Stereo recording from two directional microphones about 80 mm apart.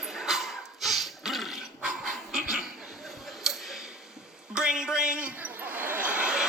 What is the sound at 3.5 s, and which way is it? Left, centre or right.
Tick, centre.